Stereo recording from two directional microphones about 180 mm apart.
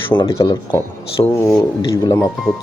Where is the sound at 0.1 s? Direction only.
20° left (ahead or behind).